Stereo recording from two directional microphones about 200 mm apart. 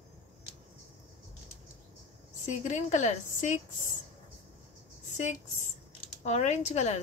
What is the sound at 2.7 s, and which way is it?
A woman's voice, 35° left (ahead or behind).